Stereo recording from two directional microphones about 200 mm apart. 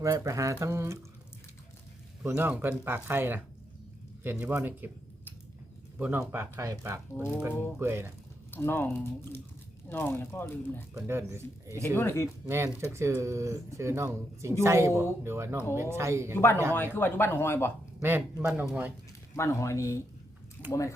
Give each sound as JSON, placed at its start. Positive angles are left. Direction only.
{"t": 0.0, "sound": "speech", "side_deg": -15}
{"t": 2.2, "sound": "speech", "side_deg": -10}
{"t": 6.0, "sound": "speech", "side_deg": -10}
{"t": 8.4, "sound": "speech", "side_deg": 10}
{"t": 10.9, "sound": "speech", "side_deg": -15}
{"t": 11.9, "sound": "speech", "side_deg": 10}
{"t": 12.5, "sound": "speech", "side_deg": -15}
{"t": 16.3, "sound": "speech", "side_deg": 10}
{"t": 18.0, "sound": "speech", "side_deg": -10}
{"t": 19.4, "sound": "speech", "side_deg": 15}